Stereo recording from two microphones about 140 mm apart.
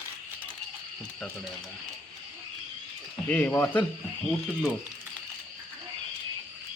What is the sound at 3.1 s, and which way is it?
Speech, 15° left (ahead or behind).